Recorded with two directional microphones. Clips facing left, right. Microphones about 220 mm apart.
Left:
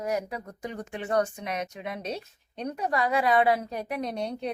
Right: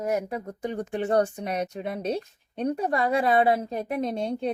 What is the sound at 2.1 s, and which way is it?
Speech, 50° right (ahead or behind).